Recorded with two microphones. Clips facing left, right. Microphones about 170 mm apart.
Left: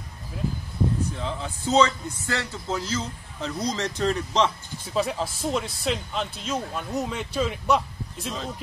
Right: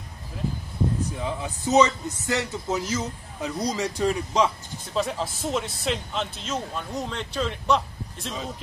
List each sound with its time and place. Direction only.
1.1 s a man's voice: 15° right (ahead or behind); by 8.5 s centre (ahead or behind)